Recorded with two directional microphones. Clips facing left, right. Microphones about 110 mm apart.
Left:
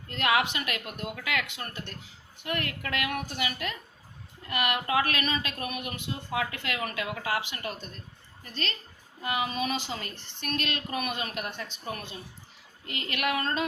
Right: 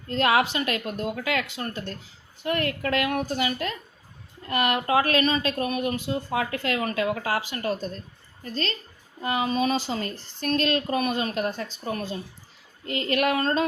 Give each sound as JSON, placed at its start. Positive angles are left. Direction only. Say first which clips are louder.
{"t": 0.1, "sound": "speech", "louder": "right 5 dB", "side_deg": -35}